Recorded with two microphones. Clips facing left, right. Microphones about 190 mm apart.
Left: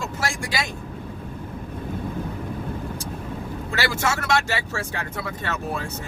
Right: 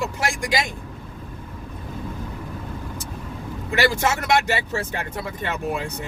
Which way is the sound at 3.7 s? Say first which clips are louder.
Right 4 dB; 20° right (ahead or behind).